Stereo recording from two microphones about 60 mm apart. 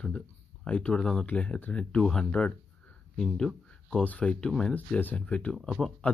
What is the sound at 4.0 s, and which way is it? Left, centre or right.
Speech, left.